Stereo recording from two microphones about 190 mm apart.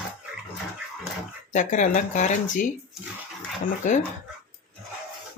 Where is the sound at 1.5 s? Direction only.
40° left (ahead or behind).